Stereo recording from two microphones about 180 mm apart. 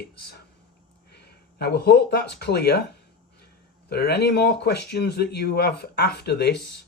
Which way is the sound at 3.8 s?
65° left (ahead or behind).